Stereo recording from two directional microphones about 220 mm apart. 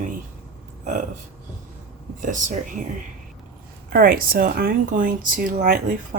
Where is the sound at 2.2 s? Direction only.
35° right (ahead or behind).